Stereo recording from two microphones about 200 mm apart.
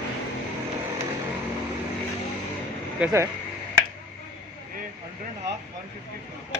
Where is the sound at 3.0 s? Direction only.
15° right (ahead or behind).